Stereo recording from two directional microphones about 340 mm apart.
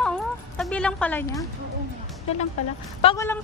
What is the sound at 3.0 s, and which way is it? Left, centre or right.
Speech, centre.